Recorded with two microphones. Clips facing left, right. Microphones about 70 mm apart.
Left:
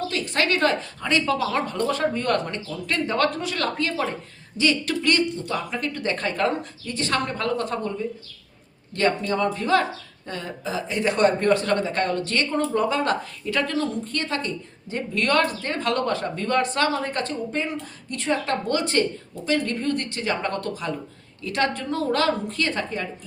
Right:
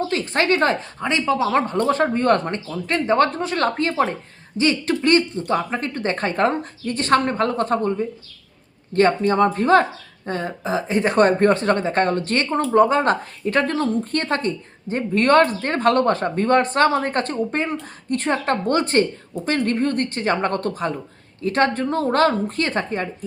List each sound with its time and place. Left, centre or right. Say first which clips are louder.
0.1 s speech: right 3 dB; right